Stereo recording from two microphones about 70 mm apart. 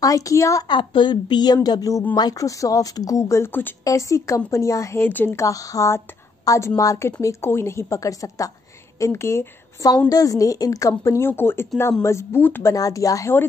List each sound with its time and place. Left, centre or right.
0.0 s a woman's voice: left
0.7 s a woman's voice: left
2.1 s speech: left
2.4 s a woman's voice: left
5.0 s speech: left
5.3 s a woman's voice: left
7.2 s a woman's voice: left
9.0 s a woman's voice: left
10.0 s a woman's voice: left
11.1 s a woman's voice: left
12.4 s speech: left
12.6 s a woman's voice: left